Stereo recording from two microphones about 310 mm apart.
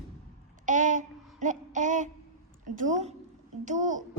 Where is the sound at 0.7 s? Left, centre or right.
Right.